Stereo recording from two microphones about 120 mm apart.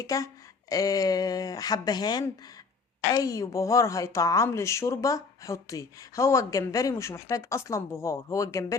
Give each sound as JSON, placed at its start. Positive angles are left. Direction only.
{"t": 0.0, "sound": "a woman's voice", "side_deg": 30}